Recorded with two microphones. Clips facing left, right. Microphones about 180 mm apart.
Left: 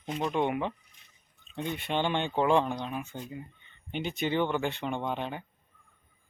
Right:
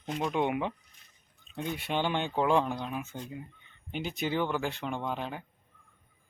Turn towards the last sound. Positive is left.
turn(degrees=0)  # may be behind; listen again after turning